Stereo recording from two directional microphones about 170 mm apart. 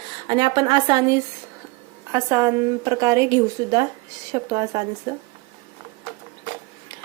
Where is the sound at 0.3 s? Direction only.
25° right (ahead or behind).